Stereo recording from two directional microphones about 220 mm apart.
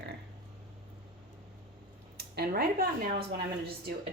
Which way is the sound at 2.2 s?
45° right (ahead or behind).